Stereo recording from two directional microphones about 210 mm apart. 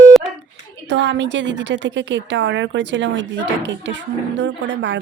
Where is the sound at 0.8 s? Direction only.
55° right (ahead or behind).